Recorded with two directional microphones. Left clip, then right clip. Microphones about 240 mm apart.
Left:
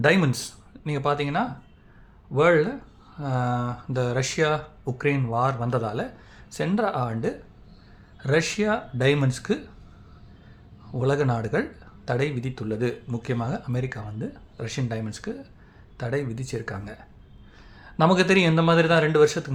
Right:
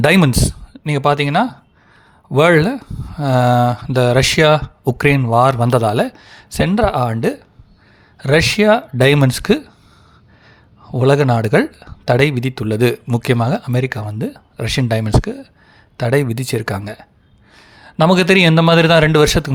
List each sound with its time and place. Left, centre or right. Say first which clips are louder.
0.0 s speech: right 8 dB; right
10.9 s a man's voice: right 11 dB; right